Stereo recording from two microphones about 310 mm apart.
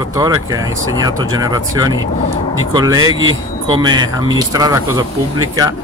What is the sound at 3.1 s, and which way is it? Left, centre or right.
Speech, right.